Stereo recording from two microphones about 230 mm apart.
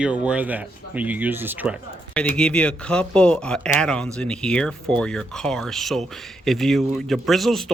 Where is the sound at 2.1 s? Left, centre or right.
Centre.